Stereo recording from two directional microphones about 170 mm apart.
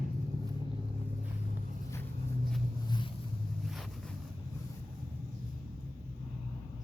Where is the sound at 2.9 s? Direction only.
30° left (ahead or behind).